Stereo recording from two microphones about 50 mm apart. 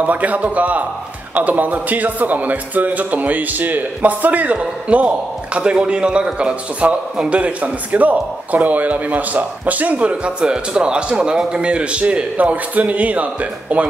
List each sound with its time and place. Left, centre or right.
0.0 s a man's voice: right